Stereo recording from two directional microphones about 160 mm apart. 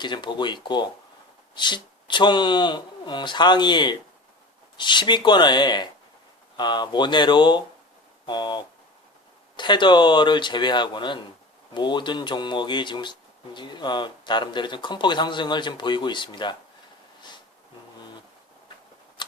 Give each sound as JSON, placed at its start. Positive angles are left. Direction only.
{"t": 0.0, "sound": "speech", "side_deg": 30}